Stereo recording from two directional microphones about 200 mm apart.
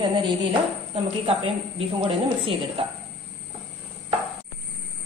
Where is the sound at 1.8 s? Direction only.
30° right (ahead or behind).